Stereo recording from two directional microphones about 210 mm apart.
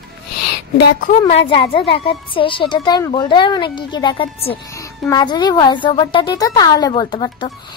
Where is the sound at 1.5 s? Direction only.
25° left (ahead or behind).